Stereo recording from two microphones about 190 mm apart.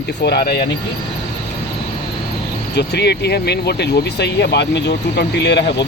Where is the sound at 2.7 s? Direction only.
60° left (ahead or behind).